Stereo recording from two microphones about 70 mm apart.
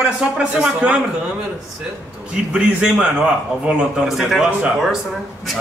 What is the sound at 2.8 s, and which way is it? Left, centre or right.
Speech, centre.